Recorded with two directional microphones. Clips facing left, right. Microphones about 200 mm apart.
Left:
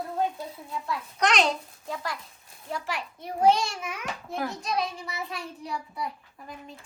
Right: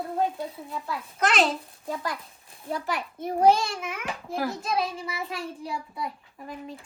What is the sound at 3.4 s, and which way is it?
A child's voice, 5° right (ahead or behind).